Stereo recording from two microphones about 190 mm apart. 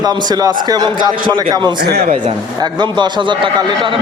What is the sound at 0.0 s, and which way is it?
Speech, 20° right (ahead or behind).